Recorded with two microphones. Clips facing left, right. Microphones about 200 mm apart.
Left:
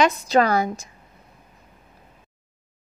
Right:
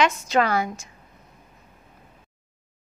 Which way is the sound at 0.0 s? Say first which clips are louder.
Left 3 dB; 35° left (ahead or behind).